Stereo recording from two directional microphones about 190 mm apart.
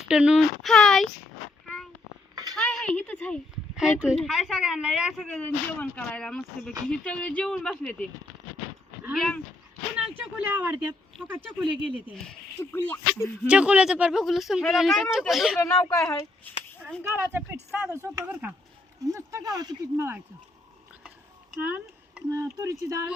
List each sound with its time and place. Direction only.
0.1 s a woman's voice: 5° right (ahead or behind)
2.3 s a sound: 20° right (ahead or behind)
2.6 s a sound: 5° left (ahead or behind)
3.8 s a woman's voice: 5° right (ahead or behind)
9.1 s a woman's voice: centre (ahead or behind)
10.3 s speech: 10° right (ahead or behind)
12.1 s speech: 5° left (ahead or behind)
13.5 s a woman's voice: 5° right (ahead or behind)
15.5 s speech: 10° left (ahead or behind)
17.0 s a woman's voice: 10° right (ahead or behind)
17.9 s speech: 15° right (ahead or behind)
21.6 s speech: 10° right (ahead or behind)